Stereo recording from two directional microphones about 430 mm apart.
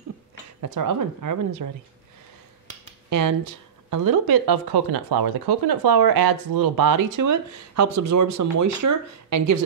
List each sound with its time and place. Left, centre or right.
0.6 s speech: right
3.1 s speech: right
7.2 s speech: right